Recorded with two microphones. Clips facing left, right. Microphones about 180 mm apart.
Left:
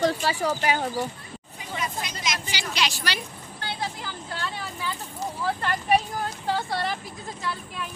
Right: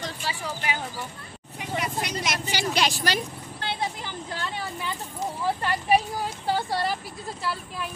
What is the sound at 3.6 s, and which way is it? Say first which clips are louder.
Vehicle: right 2 dB; 20° right (ahead or behind).